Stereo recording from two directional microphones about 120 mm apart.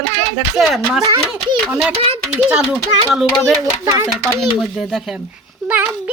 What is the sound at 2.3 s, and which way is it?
Speech, 10° right (ahead or behind).